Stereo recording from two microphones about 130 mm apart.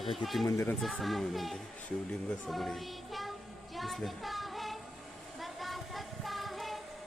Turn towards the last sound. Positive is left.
turn(degrees=0)  # may be behind; listen again after turning